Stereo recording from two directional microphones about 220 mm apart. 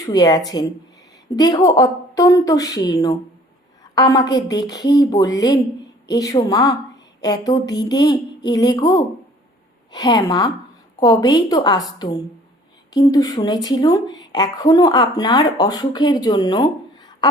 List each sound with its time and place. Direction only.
0.0 s a woman's voice: 15° left (ahead or behind)